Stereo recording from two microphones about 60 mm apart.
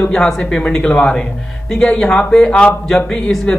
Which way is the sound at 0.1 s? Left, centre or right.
Centre.